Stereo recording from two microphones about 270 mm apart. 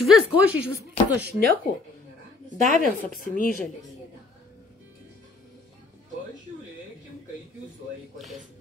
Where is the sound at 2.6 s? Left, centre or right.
Left.